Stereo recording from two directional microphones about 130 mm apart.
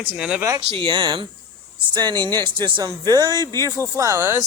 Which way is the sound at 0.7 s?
40° right (ahead or behind).